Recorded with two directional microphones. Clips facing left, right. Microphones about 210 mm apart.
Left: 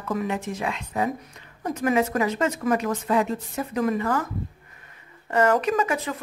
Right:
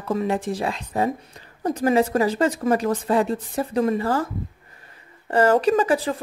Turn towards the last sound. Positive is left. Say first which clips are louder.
# right 5 dB
turn(degrees=-30)  # may be behind; listen again after turning